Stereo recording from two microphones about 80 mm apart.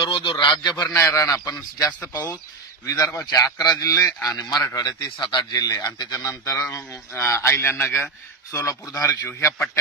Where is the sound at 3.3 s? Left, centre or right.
Left.